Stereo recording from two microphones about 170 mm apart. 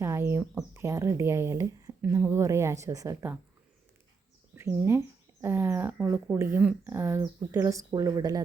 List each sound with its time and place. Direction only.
0.0 s a sound: 15° right (ahead or behind)
0.7 s speech: 15° right (ahead or behind)
4.5 s speech: 15° right (ahead or behind)